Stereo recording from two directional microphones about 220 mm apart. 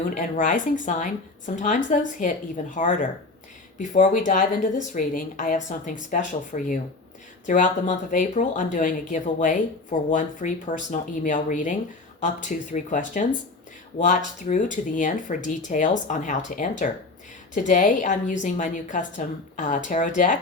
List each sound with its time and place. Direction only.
0.1 s a woman's voice: 35° left (ahead or behind)